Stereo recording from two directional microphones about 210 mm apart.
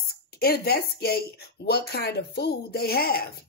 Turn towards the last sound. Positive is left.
turn(degrees=45)  # may be behind; listen again after turning